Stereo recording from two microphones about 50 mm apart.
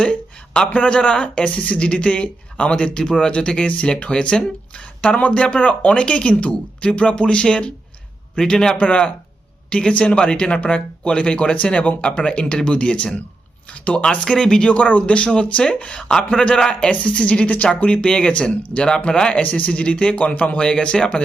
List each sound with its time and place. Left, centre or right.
0.0 s speech: left
8.8 s speech: left
14.7 s speech: left
16.0 s speech: centre
19.4 s speech: left